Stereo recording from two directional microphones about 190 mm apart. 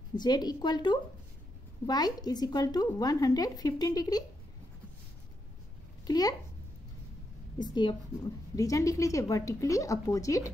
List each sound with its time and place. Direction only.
0.1 s a woman's voice: 20° left (ahead or behind)
6.0 s speech: 20° left (ahead or behind)
7.5 s a woman's voice: 25° left (ahead or behind)